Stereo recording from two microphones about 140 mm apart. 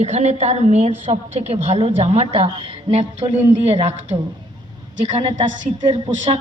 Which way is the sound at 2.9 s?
55° right (ahead or behind).